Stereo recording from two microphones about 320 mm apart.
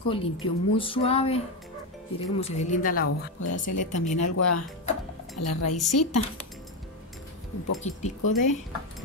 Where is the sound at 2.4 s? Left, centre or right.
Left.